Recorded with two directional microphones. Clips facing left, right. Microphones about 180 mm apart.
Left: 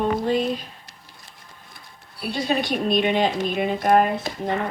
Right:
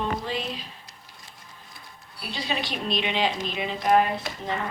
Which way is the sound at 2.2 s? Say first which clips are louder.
Left 7 dB; 50° left (ahead or behind).